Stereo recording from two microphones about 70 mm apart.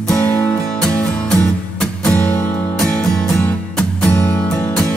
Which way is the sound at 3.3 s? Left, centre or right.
Left.